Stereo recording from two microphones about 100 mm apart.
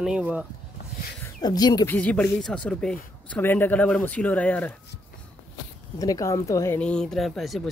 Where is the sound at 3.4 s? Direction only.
20° left (ahead or behind).